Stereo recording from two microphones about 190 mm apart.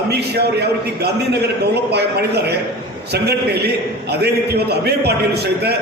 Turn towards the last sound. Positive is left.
turn(degrees=-60)  # may be behind; listen again after turning